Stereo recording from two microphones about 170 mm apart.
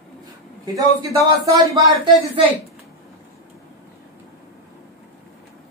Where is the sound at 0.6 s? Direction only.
20° right (ahead or behind).